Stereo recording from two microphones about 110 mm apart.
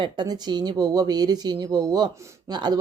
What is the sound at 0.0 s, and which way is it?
Speech, 40° right (ahead or behind).